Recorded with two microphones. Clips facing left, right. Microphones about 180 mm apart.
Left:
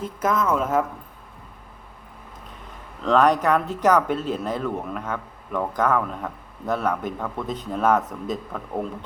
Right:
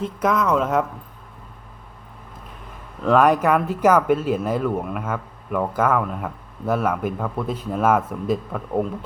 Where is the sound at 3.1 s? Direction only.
10° right (ahead or behind).